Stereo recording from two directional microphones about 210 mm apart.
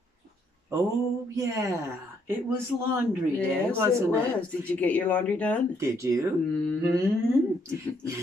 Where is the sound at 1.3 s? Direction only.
15° right (ahead or behind).